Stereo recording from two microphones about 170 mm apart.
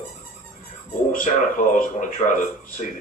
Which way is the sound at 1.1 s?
50° left (ahead or behind).